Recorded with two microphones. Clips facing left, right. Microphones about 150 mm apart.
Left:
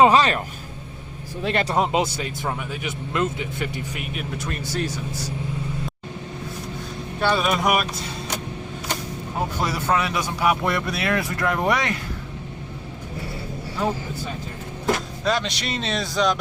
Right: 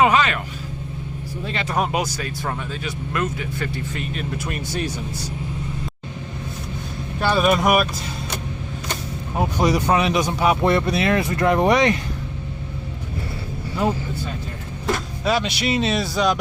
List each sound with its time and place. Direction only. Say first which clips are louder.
0.0 s speech: left 2 dB; 35° left (ahead or behind)
1.6 s speech: right 1 dB; 20° left (ahead or behind)
4.4 s speech: left 1 dB; 15° right (ahead or behind)
7.2 s speech: right 3 dB; 5° right (ahead or behind)
9.6 s speech: right 5 dB; 15° right (ahead or behind)
15.2 s speech: right 3 dB; 5° right (ahead or behind)